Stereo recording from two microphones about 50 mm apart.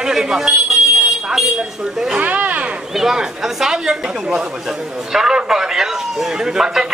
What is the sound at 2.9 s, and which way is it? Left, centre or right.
Speech, centre.